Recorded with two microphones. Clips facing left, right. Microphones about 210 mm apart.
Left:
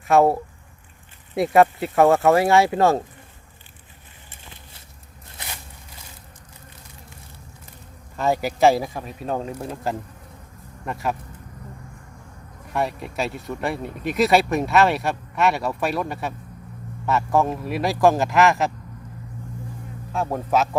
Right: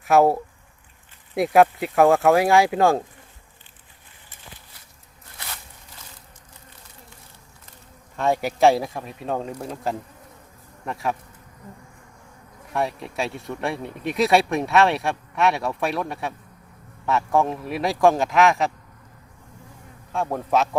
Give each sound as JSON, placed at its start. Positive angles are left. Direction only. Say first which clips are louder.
{"t": 0.0, "sound": "speech", "louder": "even", "side_deg": 0}
{"t": 1.4, "sound": "speech", "louder": "even", "side_deg": 0}
{"t": 5.4, "sound": "a sound", "louder": "left 1 dB", "side_deg": 20}
{"t": 8.1, "sound": "speech", "louder": "even", "side_deg": 0}
{"t": 12.7, "sound": "speech", "louder": "left 1 dB", "side_deg": 0}
{"t": 20.1, "sound": "speech", "louder": "even", "side_deg": 0}